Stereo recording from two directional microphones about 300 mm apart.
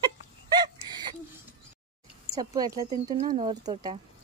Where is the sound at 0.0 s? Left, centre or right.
Centre.